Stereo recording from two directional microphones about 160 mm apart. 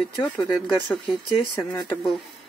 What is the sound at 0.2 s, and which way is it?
Speech, 5° left (ahead or behind).